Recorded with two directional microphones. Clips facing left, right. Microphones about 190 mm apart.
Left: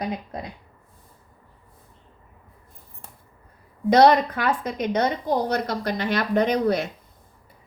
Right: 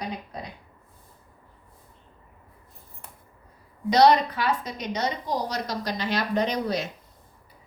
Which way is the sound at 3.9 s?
50° left (ahead or behind).